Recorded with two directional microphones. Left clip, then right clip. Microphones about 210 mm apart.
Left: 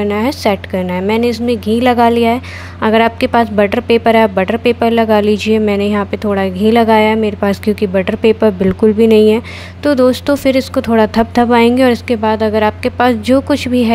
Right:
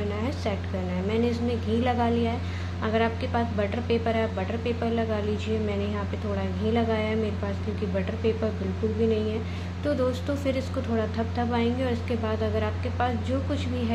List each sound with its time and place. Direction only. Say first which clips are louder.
0.1 s speech: left 17 dB; 50° left (ahead or behind)